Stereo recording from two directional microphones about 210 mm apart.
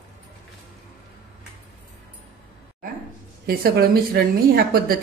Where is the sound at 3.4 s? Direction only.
45° right (ahead or behind).